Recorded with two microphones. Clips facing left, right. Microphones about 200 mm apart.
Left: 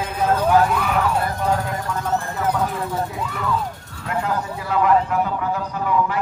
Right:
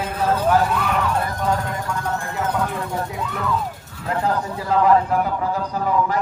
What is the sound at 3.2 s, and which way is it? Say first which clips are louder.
Music: even; centre (ahead or behind).